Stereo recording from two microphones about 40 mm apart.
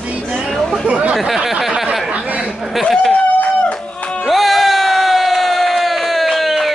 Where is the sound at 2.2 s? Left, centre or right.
Right.